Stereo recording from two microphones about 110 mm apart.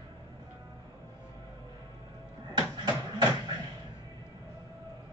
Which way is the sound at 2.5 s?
40° right (ahead or behind).